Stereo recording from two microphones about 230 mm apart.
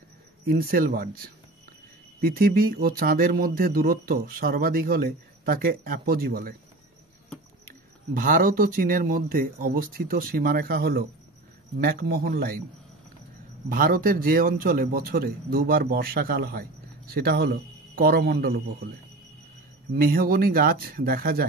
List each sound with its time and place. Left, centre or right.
0.5 s speech: right
7.6 s speech: right
13.7 s speech: right
19.9 s speech: right